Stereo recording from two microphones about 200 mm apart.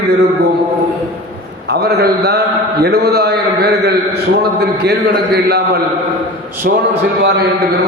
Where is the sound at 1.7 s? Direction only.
55° right (ahead or behind).